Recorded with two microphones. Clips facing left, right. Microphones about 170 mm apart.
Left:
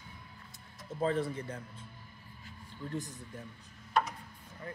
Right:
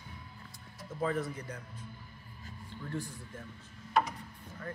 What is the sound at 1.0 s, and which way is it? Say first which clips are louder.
Speech: left 2 dB; 30° left (ahead or behind).